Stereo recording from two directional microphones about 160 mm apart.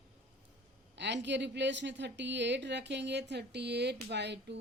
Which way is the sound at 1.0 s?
90° right.